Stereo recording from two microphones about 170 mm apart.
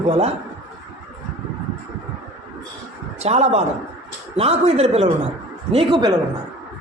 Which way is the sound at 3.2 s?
40° right (ahead or behind).